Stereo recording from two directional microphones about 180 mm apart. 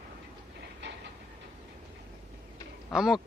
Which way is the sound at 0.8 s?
80° right.